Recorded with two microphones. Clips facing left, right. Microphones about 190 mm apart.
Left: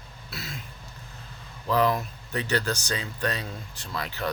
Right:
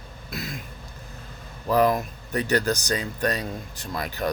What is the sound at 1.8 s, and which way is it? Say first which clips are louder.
Speech: right 4 dB; 45° right (ahead or behind).